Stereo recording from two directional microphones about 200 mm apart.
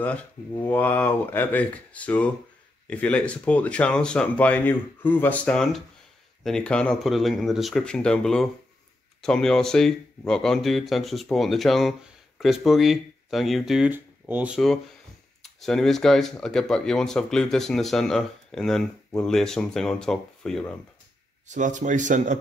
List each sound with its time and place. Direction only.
0.0 s speech: 5° left (ahead or behind)
21.5 s speech: 40° right (ahead or behind)